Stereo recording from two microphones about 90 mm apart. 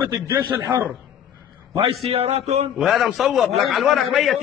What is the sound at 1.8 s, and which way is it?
Speech, 90° right.